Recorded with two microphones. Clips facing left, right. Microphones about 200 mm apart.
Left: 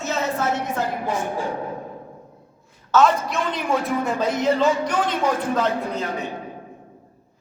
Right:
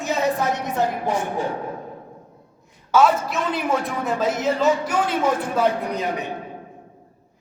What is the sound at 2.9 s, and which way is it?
A man's voice, 5° right (ahead or behind).